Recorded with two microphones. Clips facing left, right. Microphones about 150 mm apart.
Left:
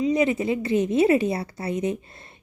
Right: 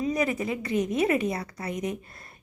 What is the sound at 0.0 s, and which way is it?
A woman's voice, 25° left (ahead or behind).